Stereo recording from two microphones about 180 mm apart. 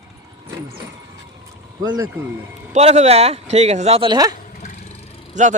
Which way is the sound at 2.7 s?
40° right (ahead or behind).